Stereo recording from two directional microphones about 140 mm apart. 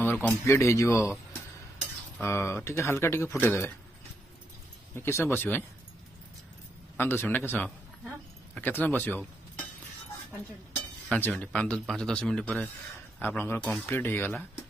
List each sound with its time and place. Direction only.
0.0 s a man's voice: 15° left (ahead or behind)
4.9 s speech: 15° left (ahead or behind)
7.0 s speech: 15° left (ahead or behind)
11.1 s speech: 15° left (ahead or behind)
13.2 s speech: 15° left (ahead or behind)